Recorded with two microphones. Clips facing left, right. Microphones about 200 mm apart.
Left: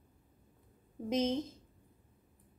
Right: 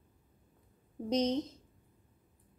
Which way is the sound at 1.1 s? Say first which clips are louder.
Right 1 dB; 5° left (ahead or behind).